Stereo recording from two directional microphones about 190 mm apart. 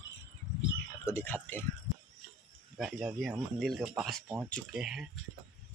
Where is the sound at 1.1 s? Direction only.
10° left (ahead or behind).